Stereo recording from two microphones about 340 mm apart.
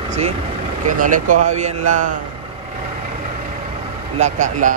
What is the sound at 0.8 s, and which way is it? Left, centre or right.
Speech, right.